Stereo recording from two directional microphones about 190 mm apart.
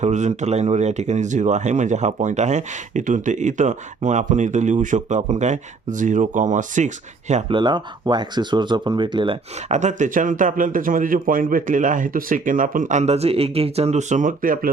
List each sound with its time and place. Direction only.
0.0 s speech: 40° right (ahead or behind)
7.6 s speech: 25° right (ahead or behind); by 14.7 s 45° right (ahead or behind)